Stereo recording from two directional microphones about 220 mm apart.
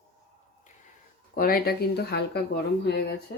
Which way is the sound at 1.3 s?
45° left (ahead or behind).